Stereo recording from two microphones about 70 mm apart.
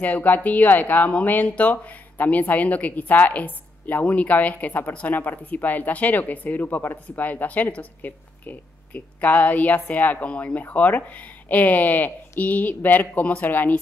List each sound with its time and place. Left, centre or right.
0.0 s speech: left